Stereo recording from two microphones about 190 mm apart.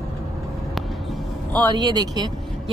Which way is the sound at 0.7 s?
Centre (ahead or behind).